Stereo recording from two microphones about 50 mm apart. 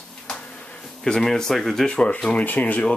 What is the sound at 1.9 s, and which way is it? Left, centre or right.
Speech, left.